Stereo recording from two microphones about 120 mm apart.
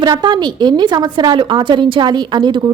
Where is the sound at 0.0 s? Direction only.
35° right (ahead or behind).